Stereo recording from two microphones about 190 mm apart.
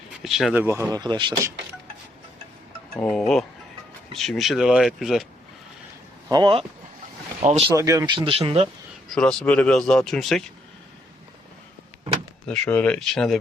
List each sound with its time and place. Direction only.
0.2 s speech: centre (ahead or behind); by 1.4 s 25° right (ahead or behind)
3.0 s speech: 5° left (ahead or behind)
6.3 s speech: 25° right (ahead or behind)
7.8 s speech: 15° right (ahead or behind)
9.0 s speech: 5° left (ahead or behind)
12.5 s speech: 5° left (ahead or behind)